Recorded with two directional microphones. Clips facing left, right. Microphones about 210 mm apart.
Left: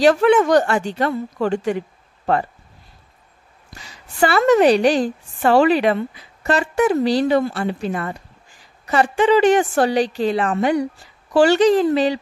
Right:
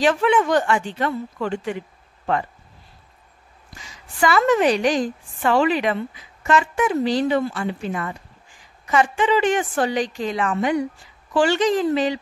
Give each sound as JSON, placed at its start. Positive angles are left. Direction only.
{"t": 0.0, "sound": "a woman's voice", "side_deg": 40}
{"t": 3.8, "sound": "a woman's voice", "side_deg": 35}